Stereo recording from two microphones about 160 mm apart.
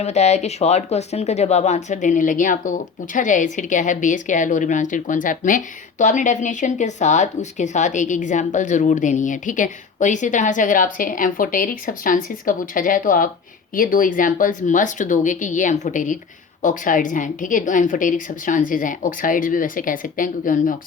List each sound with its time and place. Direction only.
0.0 s a woman's voice: 45° left (ahead or behind)